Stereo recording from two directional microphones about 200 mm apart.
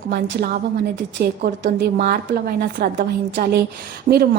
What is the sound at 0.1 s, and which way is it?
A woman's voice, 55° right (ahead or behind).